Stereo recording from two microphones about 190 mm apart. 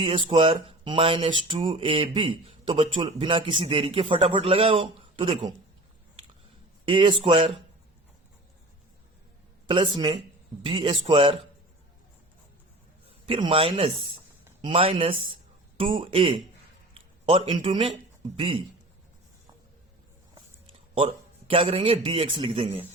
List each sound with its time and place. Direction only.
0.3 s a man's voice: 25° right (ahead or behind)
6.8 s a man's voice: 25° right (ahead or behind)
9.6 s a man's voice: 25° right (ahead or behind)
13.2 s a man's voice: 30° right (ahead or behind)
20.3 s a man's voice: 25° right (ahead or behind)